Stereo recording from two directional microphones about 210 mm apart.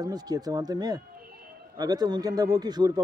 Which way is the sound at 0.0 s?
20° right (ahead or behind).